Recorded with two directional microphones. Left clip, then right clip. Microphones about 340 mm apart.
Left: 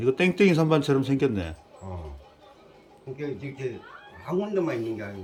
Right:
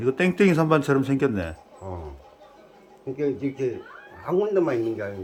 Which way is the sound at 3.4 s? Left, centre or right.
Centre.